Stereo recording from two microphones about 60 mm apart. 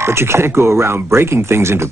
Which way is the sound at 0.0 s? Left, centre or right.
Right.